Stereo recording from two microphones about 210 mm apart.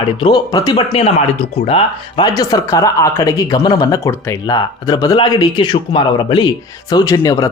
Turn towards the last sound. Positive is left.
turn(degrees=15)  # may be behind; listen again after turning